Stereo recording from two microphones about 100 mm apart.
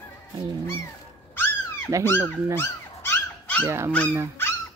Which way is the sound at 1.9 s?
30° right (ahead or behind).